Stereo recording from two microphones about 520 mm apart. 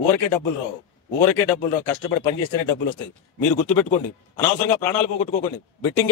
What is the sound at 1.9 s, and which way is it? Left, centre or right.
Speech, left.